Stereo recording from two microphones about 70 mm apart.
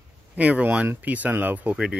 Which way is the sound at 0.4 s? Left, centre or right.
Right.